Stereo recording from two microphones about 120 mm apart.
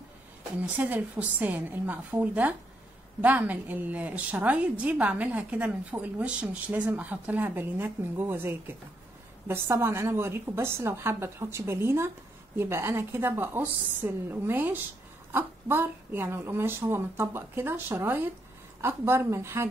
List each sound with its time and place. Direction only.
0.7 s a woman's voice: 15° right (ahead or behind)